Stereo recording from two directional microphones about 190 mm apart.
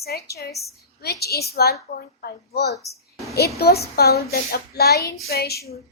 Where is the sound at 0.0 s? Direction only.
55° left (ahead or behind).